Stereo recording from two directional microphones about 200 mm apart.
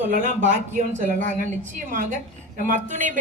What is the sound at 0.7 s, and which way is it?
Speech, 40° right (ahead or behind).